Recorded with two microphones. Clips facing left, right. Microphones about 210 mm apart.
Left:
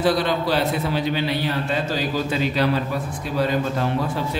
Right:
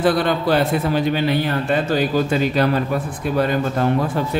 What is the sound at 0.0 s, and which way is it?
A man's voice, 55° right (ahead or behind).